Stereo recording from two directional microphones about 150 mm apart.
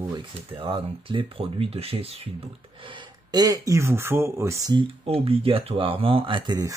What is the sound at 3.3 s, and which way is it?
Speech, 25° right (ahead or behind).